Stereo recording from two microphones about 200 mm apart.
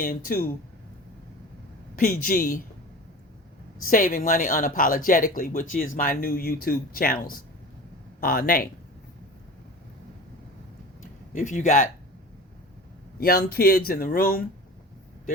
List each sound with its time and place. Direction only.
0.0 s speech: 45° left (ahead or behind)
2.2 s speech: 45° left (ahead or behind)
3.8 s speech: 45° left (ahead or behind)
11.3 s speech: 40° left (ahead or behind)
13.1 s speech: 50° left (ahead or behind)